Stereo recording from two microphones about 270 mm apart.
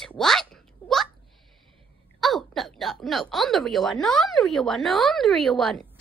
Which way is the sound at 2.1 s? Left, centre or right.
Centre.